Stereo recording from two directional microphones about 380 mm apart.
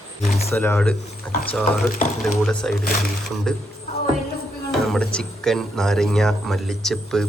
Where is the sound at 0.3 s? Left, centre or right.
Centre.